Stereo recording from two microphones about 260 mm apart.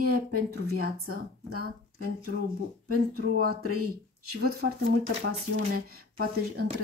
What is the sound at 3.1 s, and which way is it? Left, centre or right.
Speech, right.